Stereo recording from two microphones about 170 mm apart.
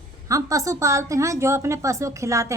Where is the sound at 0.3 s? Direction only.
20° right (ahead or behind).